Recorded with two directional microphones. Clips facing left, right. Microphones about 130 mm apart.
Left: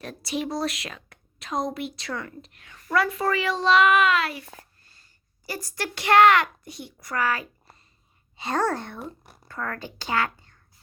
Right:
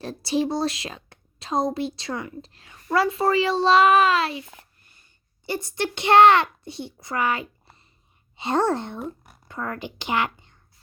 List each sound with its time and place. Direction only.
0.0 s a woman's voice: 30° right (ahead or behind)
9.0 s speech: centre (ahead or behind)
9.5 s speech: 20° right (ahead or behind)